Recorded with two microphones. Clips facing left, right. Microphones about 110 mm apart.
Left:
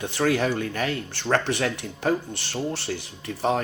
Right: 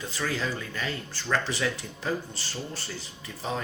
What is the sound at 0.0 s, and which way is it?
Speech, 70° left (ahead or behind).